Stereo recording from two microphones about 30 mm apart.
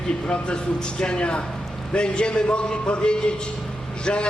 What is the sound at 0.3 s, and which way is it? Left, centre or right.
A man's voice, left.